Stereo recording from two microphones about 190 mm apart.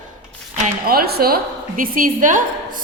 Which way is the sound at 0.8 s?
55° right (ahead or behind).